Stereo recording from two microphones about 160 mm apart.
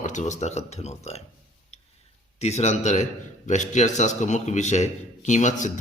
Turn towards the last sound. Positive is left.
turn(degrees=50)  # may be behind; listen again after turning